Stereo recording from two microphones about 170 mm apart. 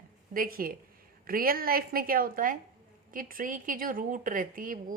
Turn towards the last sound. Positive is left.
turn(degrees=-55)  # may be behind; listen again after turning